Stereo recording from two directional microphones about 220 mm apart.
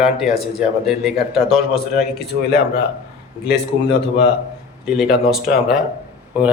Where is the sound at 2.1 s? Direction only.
45° left (ahead or behind).